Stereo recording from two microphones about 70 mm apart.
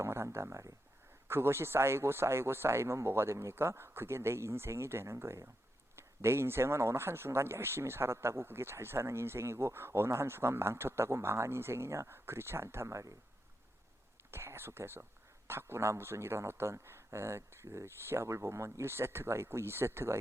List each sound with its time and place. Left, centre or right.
0.0 s a sound: right
1.3 s a man's voice: right
14.3 s a man's voice: right